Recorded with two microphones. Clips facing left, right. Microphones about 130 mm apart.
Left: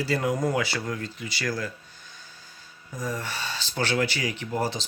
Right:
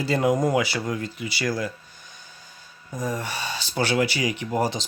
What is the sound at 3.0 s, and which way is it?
Speech, 15° right (ahead or behind).